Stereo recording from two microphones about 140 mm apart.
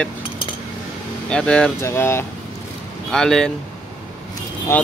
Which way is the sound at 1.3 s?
5° left (ahead or behind).